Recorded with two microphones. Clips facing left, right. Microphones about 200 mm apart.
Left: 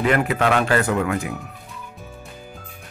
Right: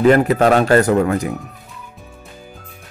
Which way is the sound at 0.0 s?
40° right (ahead or behind).